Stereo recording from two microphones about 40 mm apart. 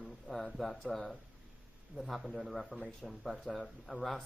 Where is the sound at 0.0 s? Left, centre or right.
Centre.